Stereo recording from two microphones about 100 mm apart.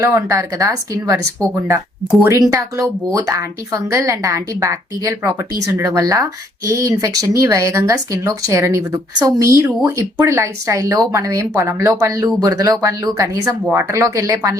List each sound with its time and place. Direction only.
0.0 s speech: 30° right (ahead or behind)
2.2 s speech: 35° right (ahead or behind)